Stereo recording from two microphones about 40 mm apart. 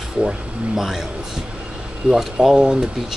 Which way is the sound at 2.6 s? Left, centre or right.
Centre.